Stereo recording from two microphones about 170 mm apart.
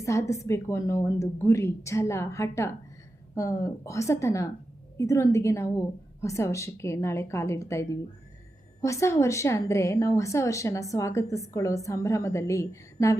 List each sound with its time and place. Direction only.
0.0 s a woman's voice: 15° left (ahead or behind)